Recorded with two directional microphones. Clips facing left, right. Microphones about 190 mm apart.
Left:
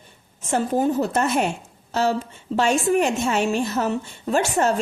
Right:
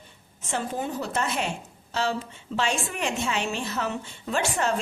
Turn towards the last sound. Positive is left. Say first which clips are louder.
# left 6 dB
turn(degrees=45)  # may be behind; listen again after turning